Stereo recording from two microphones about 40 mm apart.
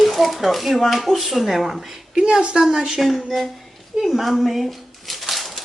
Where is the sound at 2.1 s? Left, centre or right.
Centre.